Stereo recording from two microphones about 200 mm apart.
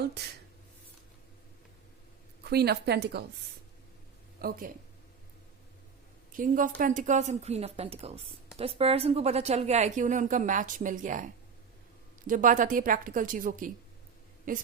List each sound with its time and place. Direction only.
0.0 s speech: 55° right (ahead or behind)
2.4 s a woman's voice: 55° right (ahead or behind)
4.4 s speech: 50° right (ahead or behind)
6.3 s a woman's voice: 40° right (ahead or behind)
12.3 s a woman's voice: 40° right (ahead or behind)